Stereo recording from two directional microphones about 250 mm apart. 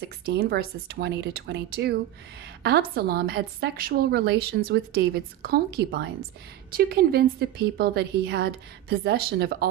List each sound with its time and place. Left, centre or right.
0.2 s a woman's voice: right